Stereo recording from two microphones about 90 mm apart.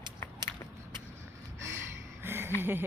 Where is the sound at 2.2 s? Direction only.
25° right (ahead or behind).